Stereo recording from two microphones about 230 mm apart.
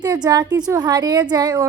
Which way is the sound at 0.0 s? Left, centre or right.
Centre.